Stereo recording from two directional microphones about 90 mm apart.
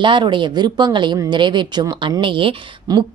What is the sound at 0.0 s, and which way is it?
A woman's voice, 65° right (ahead or behind).